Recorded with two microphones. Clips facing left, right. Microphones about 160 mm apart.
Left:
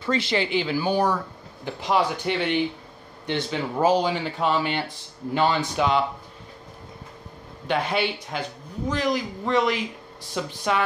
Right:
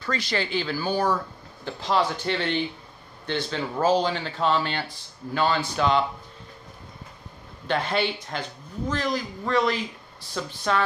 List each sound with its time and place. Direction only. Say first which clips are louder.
0.0 s speech: left 4 dB; 25° left (ahead or behind)
7.6 s speech: left 1 dB; 10° left (ahead or behind)